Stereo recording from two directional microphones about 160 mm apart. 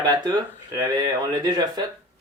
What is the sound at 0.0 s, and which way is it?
Speech, 25° right (ahead or behind).